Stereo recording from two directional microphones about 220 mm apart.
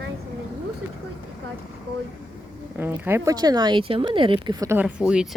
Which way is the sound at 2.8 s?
10° right (ahead or behind).